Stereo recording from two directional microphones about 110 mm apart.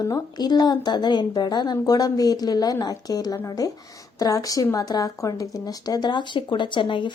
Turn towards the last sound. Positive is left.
turn(degrees=50)  # may be behind; listen again after turning